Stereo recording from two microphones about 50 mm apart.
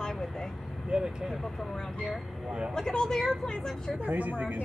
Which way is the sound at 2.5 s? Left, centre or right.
Centre.